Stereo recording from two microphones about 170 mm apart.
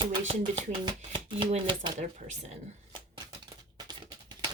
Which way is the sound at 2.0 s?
45° right (ahead or behind).